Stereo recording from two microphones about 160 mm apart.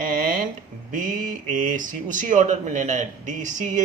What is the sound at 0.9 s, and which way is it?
Speech, 55° right (ahead or behind).